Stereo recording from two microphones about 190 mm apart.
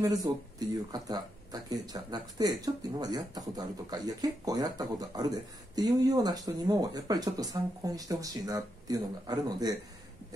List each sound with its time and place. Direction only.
0.0 s speech: 20° right (ahead or behind)